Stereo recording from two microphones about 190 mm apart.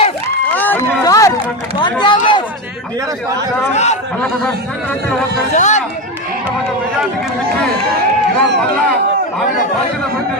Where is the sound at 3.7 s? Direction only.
35° left (ahead or behind).